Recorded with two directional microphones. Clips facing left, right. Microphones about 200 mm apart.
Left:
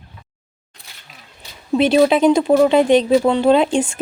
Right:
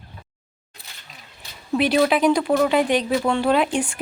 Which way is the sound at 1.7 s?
25° left (ahead or behind).